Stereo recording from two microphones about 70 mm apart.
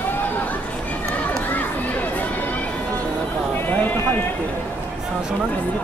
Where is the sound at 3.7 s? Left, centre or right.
Left.